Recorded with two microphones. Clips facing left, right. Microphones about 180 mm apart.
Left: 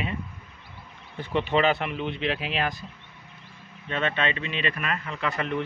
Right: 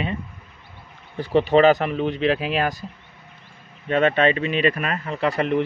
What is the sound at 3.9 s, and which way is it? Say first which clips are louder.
Speech: right 9 dB; 45° right (ahead or behind).